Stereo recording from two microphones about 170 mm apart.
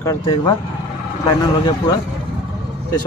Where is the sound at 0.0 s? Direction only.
20° left (ahead or behind).